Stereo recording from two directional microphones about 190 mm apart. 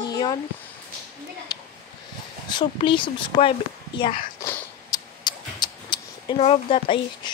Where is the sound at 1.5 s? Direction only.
20° left (ahead or behind).